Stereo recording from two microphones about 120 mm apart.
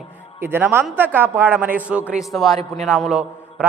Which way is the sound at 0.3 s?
20° right (ahead or behind).